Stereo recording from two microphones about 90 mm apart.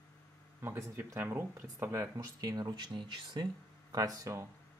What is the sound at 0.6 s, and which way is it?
Speech, 30° right (ahead or behind).